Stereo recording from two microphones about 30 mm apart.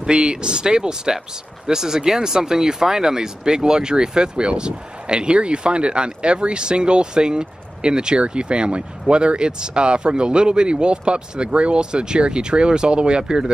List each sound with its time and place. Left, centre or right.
0.1 s speech: right